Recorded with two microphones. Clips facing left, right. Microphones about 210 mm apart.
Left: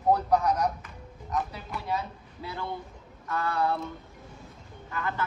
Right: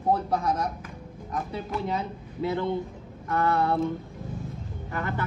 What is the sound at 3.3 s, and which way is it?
Speech, 50° right (ahead or behind).